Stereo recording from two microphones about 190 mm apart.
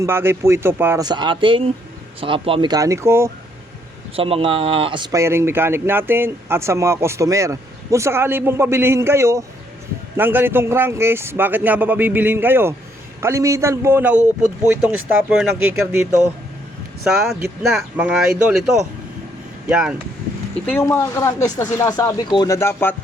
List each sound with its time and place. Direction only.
0.0 s speech: 15° right (ahead or behind)
4.1 s speech: 30° right (ahead or behind); by 16.0 s 10° right (ahead or behind)
17.2 s speech: centre (ahead or behind)
19.6 s speech: 5° right (ahead or behind)
20.7 s speech: 15° left (ahead or behind)